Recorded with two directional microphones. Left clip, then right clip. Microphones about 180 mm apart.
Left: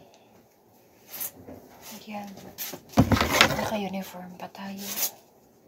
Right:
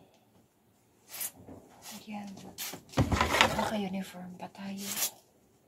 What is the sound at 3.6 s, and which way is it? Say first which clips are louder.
Speech: left 4 dB; 20° right (ahead or behind).